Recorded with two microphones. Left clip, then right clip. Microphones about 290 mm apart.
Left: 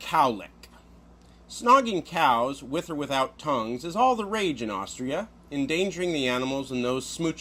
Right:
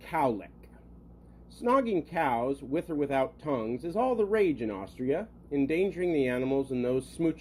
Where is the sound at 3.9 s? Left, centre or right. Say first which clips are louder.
Left 7 dB; left.